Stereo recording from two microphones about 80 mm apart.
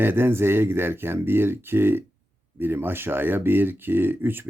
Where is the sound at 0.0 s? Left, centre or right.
Right.